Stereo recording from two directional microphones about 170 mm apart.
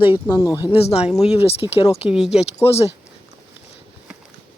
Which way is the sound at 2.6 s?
35° left (ahead or behind).